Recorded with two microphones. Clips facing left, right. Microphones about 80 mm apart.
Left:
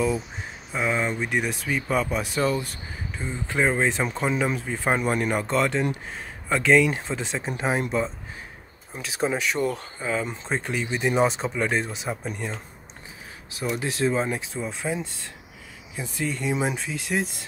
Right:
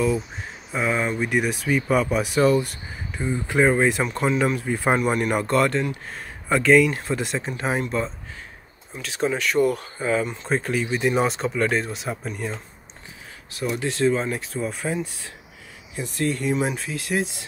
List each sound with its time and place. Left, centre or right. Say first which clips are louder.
0.7 s speech: right 2 dB; centre
3.2 s speech: right 6 dB; centre
3.5 s speech: right 4 dB; centre
9.6 s speech: right 6 dB; centre
13.7 s speech: right 3 dB; centre
14.3 s speech: right 2 dB; centre